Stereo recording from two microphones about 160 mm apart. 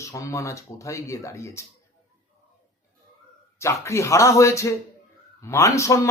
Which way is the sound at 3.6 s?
20° left (ahead or behind).